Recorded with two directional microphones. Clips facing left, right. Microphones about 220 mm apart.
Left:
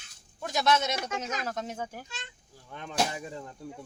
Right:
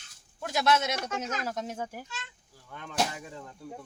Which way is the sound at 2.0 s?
15° left (ahead or behind).